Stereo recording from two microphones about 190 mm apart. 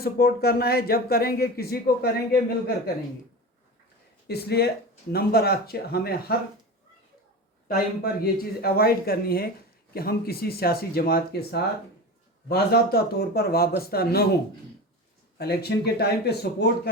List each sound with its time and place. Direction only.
0.0 s speech: 55° left (ahead or behind)
4.3 s a man's voice: 55° left (ahead or behind)
7.7 s a man's voice: 55° left (ahead or behind)
15.4 s a man's voice: 55° left (ahead or behind)